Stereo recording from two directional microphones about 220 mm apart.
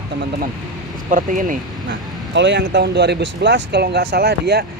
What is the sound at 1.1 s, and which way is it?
Speech, 35° right (ahead or behind).